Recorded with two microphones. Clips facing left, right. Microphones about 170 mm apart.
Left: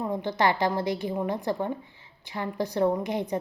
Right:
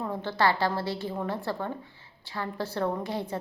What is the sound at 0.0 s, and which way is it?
A woman's voice, 15° left (ahead or behind).